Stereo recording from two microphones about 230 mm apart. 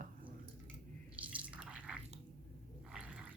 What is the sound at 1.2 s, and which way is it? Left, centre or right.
Drip, centre.